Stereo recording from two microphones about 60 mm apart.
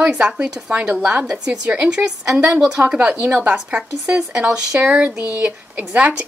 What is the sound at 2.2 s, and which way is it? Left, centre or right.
Speech, centre.